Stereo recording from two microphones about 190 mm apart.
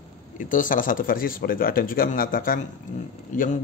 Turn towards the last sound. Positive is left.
turn(degrees=45)  # may be behind; listen again after turning